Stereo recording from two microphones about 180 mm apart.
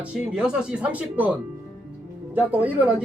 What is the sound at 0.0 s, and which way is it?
Speech, 5° right (ahead or behind).